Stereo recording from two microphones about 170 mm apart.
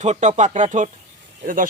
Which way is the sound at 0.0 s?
40° right (ahead or behind).